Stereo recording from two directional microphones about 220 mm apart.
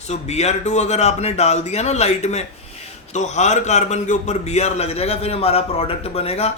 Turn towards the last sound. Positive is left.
turn(degrees=25)  # may be behind; listen again after turning